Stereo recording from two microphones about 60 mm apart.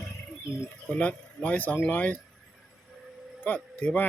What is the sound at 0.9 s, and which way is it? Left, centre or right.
Speech, left.